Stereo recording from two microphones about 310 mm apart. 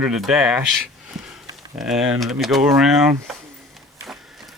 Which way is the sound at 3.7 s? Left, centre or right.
Centre.